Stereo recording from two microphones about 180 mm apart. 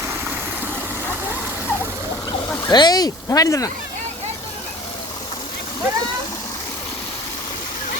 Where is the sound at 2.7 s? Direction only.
25° left (ahead or behind).